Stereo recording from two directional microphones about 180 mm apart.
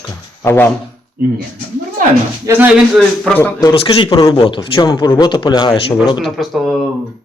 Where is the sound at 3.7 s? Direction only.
30° left (ahead or behind).